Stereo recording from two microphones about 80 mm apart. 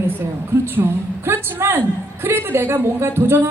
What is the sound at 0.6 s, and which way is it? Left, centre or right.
A woman's voice, right.